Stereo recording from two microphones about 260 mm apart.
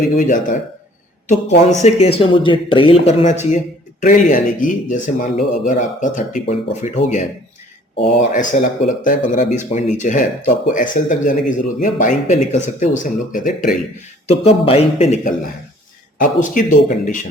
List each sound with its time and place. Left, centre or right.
0.2 s speech: left
8.0 s speech: left